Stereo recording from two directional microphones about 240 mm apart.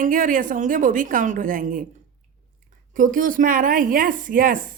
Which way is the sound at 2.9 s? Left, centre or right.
Right.